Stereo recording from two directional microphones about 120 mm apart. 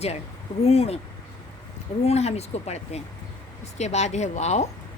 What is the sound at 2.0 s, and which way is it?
A woman's voice, 65° left (ahead or behind).